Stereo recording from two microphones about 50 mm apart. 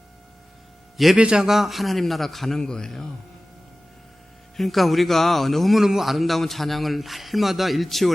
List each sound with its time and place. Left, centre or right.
1.1 s a man's voice: centre
1.5 s a man's voice: centre
4.5 s a man's voice: centre